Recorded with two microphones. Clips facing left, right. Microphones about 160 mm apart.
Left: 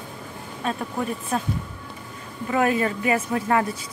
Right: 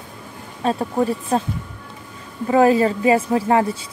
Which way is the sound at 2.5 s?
30° right (ahead or behind).